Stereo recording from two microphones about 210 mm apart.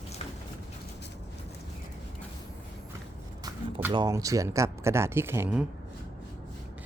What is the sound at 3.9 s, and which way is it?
Speech, 15° right (ahead or behind).